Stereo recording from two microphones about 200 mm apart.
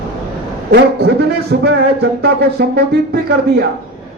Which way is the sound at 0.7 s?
55° right (ahead or behind).